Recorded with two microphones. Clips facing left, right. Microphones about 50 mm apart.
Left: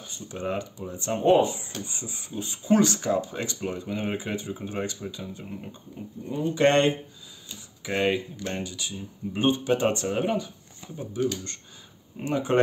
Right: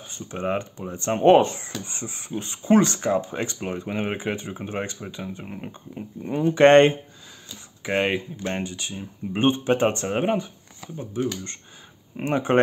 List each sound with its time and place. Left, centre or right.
0.0 s speech: right